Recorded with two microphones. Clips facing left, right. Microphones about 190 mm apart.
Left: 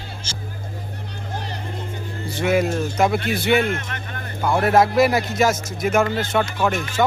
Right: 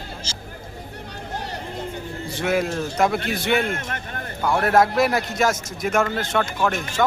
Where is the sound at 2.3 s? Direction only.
Centre (ahead or behind).